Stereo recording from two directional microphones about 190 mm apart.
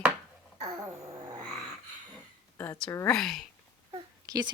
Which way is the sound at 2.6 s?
10° left (ahead or behind).